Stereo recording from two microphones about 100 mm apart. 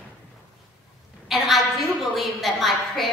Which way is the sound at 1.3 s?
Centre (ahead or behind).